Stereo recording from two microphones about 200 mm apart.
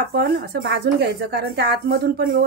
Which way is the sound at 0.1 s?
55° right (ahead or behind).